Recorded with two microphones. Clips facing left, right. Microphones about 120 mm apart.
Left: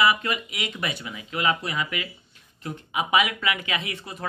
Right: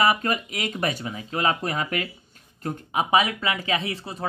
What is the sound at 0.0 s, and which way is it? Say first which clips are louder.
Speech: right 1 dB; 40° right (ahead or behind).